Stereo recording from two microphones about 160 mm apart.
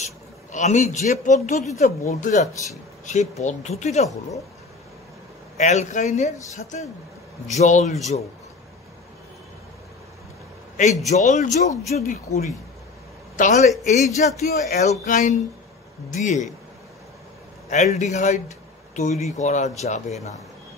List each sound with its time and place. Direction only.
0.0 s speech: 45° left (ahead or behind)
5.6 s speech: 45° left (ahead or behind)
11.1 s speech: 45° left (ahead or behind)
13.4 s speech: 45° left (ahead or behind)
17.6 s speech: 50° left (ahead or behind)